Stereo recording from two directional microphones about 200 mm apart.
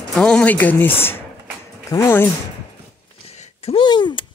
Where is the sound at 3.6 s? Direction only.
25° left (ahead or behind).